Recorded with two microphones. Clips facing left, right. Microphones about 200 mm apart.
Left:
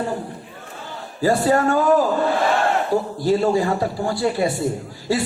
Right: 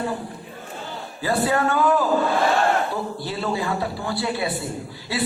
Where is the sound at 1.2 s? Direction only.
40° left (ahead or behind).